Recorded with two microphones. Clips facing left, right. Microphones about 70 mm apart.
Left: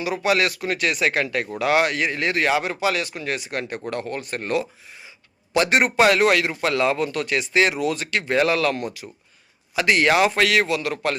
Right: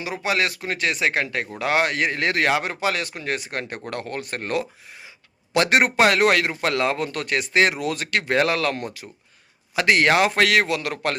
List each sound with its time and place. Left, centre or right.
0.0 s speech: right